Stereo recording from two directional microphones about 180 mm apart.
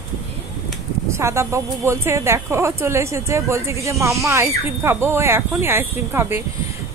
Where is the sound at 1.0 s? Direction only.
15° right (ahead or behind).